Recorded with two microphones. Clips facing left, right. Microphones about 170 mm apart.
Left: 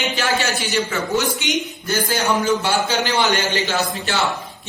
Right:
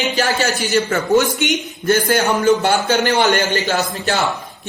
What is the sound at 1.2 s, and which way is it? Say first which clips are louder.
A man's voice: right 3 dB; 55° right (ahead or behind).